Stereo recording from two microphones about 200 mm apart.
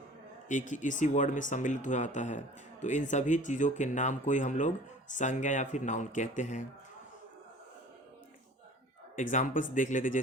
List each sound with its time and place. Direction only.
0.4 s speech: 40° left (ahead or behind)
9.1 s speech: 40° left (ahead or behind)